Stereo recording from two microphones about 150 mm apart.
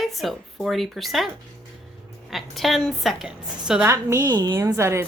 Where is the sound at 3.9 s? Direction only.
20° right (ahead or behind).